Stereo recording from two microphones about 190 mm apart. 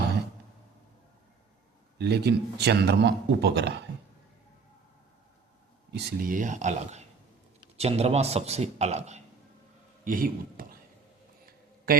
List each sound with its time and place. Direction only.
2.0 s speech: 60° right (ahead or behind)
5.9 s a man's voice: 60° right (ahead or behind); by 9.2 s 35° right (ahead or behind)
10.0 s speech: 45° right (ahead or behind)
11.9 s speech: 50° right (ahead or behind)